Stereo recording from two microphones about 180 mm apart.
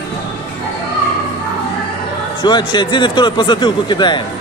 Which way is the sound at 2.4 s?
25° left (ahead or behind).